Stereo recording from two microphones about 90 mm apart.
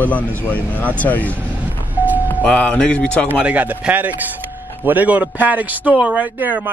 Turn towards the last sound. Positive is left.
turn(degrees=-20)  # may be behind; listen again after turning